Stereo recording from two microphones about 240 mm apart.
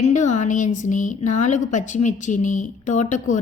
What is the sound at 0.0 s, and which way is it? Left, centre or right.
A woman's voice, left.